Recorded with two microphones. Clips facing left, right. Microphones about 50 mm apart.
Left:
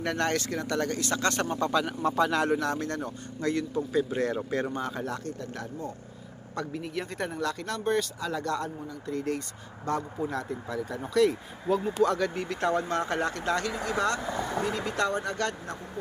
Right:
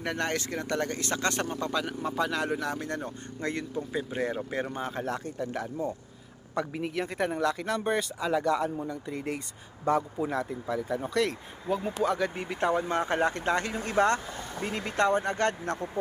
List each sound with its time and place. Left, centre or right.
0.0 s speech: centre
1.5 s speech: centre; by 3.7 s right
3.9 s speech: centre
5.2 s a man's voice: centre
6.9 s speech: centre; by 15.5 s right